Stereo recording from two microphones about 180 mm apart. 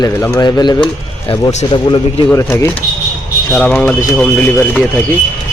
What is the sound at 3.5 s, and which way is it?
A man's voice, 5° left (ahead or behind).